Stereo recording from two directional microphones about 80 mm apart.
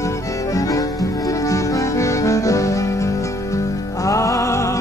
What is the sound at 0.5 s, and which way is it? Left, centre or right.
Music, left.